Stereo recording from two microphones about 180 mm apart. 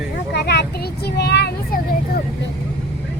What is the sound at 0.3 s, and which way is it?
Child singing, 65° left (ahead or behind).